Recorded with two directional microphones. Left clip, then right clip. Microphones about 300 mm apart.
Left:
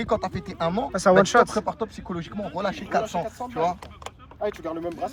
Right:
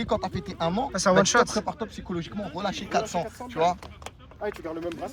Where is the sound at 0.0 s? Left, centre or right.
Centre.